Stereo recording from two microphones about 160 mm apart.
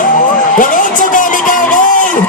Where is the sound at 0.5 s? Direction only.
55° left (ahead or behind).